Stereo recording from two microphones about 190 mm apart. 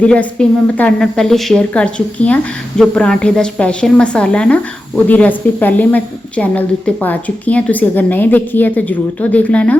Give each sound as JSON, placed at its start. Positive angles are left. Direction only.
{"t": 0.0, "sound": "a woman's voice", "side_deg": 5}